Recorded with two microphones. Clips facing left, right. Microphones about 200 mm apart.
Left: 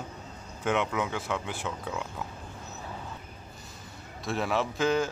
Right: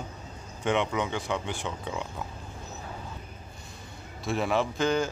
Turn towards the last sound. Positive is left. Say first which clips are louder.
# even
turn(degrees=0)  # may be behind; listen again after turning